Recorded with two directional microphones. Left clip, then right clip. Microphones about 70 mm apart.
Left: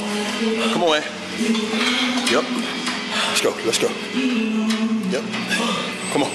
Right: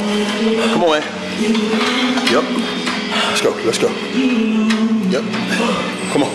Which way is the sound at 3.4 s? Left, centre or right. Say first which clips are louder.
Right 4 dB; centre.